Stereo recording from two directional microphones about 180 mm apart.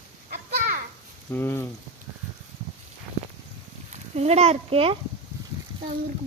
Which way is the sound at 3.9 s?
35° right (ahead or behind).